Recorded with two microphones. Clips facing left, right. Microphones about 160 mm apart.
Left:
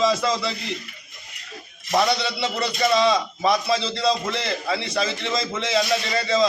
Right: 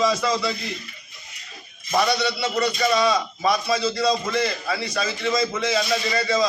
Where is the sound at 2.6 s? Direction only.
25° left (ahead or behind).